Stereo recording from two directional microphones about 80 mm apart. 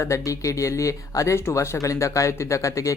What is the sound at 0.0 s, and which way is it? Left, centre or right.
Speech, left.